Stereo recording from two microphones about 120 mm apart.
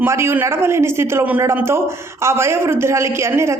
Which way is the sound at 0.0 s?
20° right (ahead or behind).